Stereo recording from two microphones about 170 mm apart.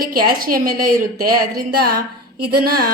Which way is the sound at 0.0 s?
60° right (ahead or behind).